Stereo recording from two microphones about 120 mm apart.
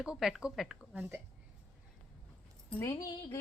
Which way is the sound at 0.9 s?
15° right (ahead or behind).